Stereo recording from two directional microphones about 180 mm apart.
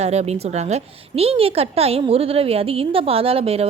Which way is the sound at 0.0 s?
35° right (ahead or behind).